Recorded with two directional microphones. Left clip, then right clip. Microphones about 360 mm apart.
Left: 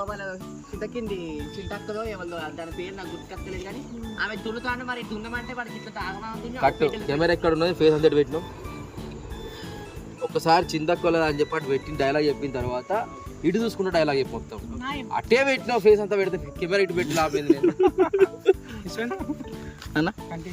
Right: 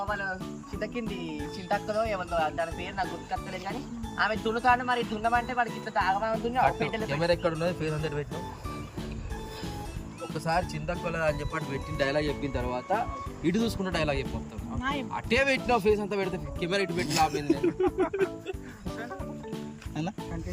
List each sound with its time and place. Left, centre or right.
0.8 s speech: centre
4.2 s speech: centre
7.1 s speech: centre
10.3 s speech: centre
17.7 s music: centre
19.9 s speech: centre